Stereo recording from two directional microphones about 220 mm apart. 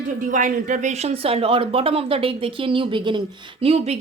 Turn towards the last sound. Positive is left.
turn(degrees=-30)  # may be behind; listen again after turning